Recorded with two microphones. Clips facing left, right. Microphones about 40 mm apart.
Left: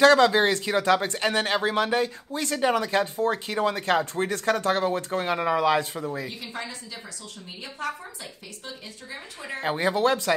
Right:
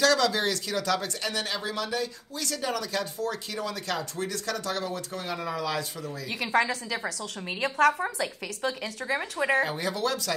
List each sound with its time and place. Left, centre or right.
0.0 s speech: left
6.2 s a woman's voice: right
9.6 s speech: left